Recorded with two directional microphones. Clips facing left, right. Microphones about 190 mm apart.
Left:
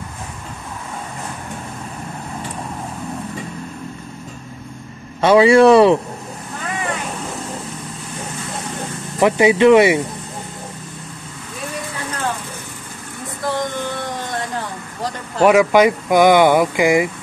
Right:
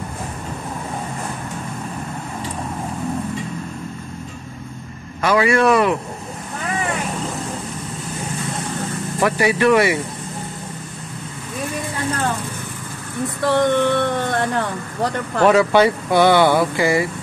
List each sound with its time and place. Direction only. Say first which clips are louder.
5.2 s speech: left 6 dB; 25° left (ahead or behind)
9.2 s speech: left 5 dB; 20° left (ahead or behind)
13.5 s speech: right 7 dB; 65° right (ahead or behind)
15.4 s speech: left 2 dB; 10° left (ahead or behind)